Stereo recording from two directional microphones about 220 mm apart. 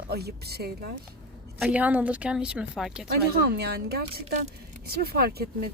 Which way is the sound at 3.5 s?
45° right (ahead or behind).